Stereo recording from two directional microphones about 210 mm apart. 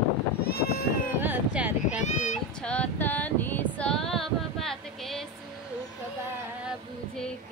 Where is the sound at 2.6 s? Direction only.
5° left (ahead or behind).